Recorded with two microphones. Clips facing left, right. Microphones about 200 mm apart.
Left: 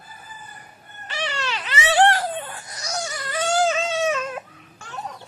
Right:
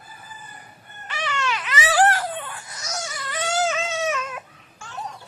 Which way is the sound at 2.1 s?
30° left (ahead or behind).